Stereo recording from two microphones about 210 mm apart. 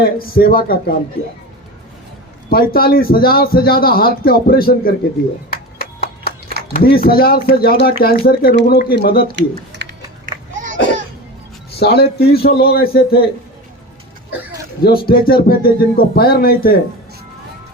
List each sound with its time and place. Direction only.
0.0 s a man's voice: 45° left (ahead or behind)
2.5 s a man's voice: 45° left (ahead or behind)
5.5 s a sound: 45° left (ahead or behind)
6.7 s a man's voice: 45° left (ahead or behind)
9.2 s speech: 50° right (ahead or behind)
11.8 s a man's voice: 50° left (ahead or behind)
14.8 s a man's voice: 45° left (ahead or behind)